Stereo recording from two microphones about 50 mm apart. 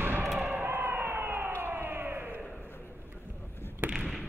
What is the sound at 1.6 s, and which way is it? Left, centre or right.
Crowd, right.